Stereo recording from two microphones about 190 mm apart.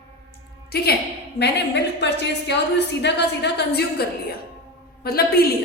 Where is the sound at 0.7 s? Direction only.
55° left (ahead or behind).